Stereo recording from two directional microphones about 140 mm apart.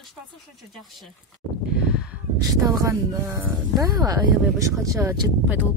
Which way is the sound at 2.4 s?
25° right (ahead or behind).